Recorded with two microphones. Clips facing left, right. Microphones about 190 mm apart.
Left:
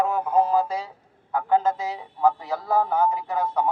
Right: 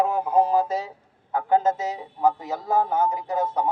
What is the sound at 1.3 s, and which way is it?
Speech, 20° right (ahead or behind).